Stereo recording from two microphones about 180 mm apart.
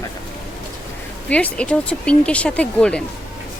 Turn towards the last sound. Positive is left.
turn(degrees=5)  # may be behind; listen again after turning